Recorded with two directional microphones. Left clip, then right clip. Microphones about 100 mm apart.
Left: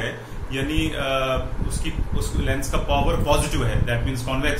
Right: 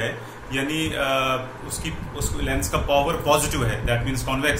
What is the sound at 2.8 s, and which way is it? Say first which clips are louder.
A man's voice: right 2 dB; 15° right (ahead or behind).